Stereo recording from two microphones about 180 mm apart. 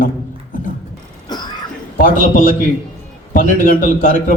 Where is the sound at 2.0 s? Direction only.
50° left (ahead or behind).